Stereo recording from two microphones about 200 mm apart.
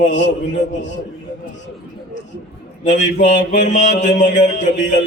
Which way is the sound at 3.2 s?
40° left (ahead or behind).